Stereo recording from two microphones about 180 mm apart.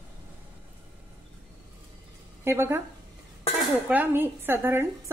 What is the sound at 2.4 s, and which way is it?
Speech, 15° right (ahead or behind).